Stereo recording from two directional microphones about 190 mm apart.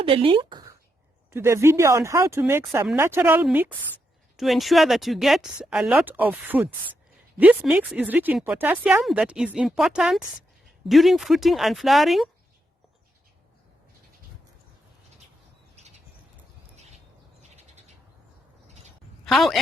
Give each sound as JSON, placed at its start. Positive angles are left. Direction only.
{"t": 0.0, "sound": "speech", "side_deg": -25}
{"t": 1.3, "sound": "speech", "side_deg": -15}
{"t": 15.7, "sound": "bird", "side_deg": -35}
{"t": 19.2, "sound": "a woman's voice", "side_deg": 0}